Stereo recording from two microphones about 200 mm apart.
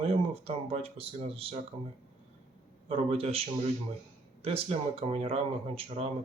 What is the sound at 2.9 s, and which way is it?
Speech, 30° right (ahead or behind).